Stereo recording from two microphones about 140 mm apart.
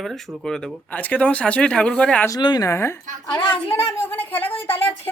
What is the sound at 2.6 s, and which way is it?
A woman's voice, 20° left (ahead or behind).